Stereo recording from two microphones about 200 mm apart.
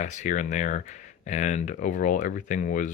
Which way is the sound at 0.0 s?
35° left (ahead or behind).